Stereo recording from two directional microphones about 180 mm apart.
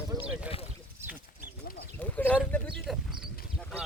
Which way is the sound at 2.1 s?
10° left (ahead or behind).